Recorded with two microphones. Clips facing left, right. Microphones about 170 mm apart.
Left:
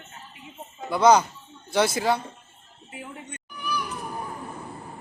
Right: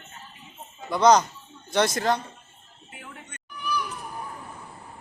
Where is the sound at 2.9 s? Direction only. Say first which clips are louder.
Left 5 dB; 25° left (ahead or behind).